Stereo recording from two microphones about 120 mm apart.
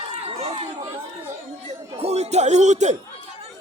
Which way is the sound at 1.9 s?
60° right (ahead or behind).